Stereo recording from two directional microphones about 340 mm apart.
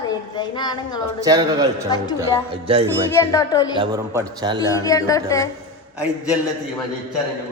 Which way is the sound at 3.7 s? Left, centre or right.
Centre.